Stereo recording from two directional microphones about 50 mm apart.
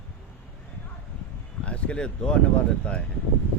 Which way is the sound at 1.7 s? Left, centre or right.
Left.